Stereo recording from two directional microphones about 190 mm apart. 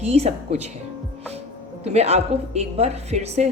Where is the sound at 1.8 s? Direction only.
35° right (ahead or behind).